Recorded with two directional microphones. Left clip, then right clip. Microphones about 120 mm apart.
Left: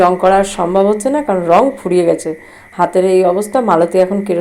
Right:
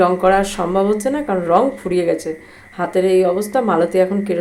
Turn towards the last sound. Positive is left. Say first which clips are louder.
# left 4 dB
turn(degrees=15)  # may be behind; listen again after turning